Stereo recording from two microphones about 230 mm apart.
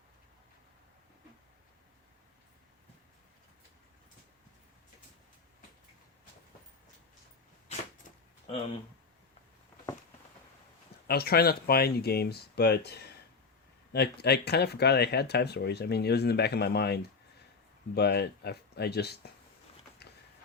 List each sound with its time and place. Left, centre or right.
11.0 s speech: left
20.0 s walk: left